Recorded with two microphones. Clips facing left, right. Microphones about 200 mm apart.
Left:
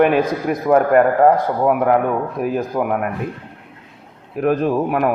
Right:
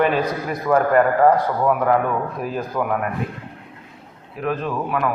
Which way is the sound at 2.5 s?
10° left (ahead or behind).